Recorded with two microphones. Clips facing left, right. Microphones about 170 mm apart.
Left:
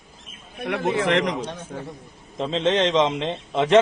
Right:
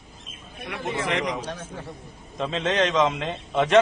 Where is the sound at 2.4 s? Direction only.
30° left (ahead or behind).